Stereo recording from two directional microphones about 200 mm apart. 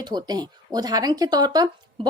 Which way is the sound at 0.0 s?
20° right (ahead or behind).